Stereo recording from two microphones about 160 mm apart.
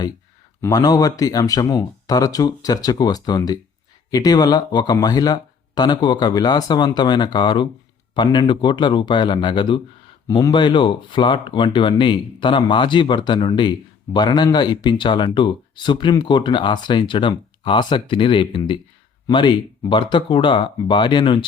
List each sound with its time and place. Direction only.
0.6 s speech: 20° left (ahead or behind)